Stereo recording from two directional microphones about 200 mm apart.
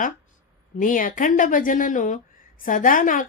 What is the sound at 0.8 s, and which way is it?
A woman's voice, 40° left (ahead or behind).